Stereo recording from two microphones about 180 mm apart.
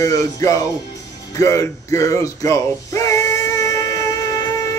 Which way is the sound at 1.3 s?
15° left (ahead or behind).